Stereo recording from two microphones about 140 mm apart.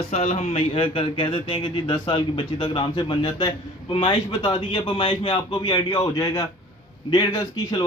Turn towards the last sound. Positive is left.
turn(degrees=30)  # may be behind; listen again after turning